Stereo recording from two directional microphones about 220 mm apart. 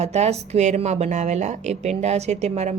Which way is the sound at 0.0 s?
30° right (ahead or behind).